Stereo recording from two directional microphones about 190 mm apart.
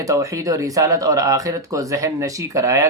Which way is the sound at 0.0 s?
15° right (ahead or behind).